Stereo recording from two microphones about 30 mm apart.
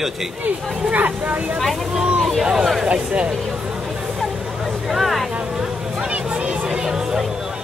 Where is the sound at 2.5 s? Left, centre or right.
Centre.